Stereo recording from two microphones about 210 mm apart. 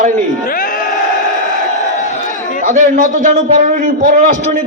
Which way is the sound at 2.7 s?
35° right (ahead or behind).